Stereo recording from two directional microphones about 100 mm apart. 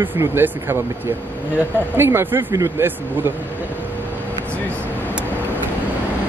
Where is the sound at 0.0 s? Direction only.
20° right (ahead or behind).